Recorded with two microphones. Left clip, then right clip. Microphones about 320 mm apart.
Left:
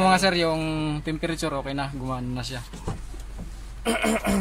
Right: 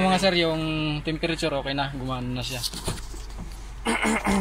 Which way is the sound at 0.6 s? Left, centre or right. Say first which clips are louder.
Even; left.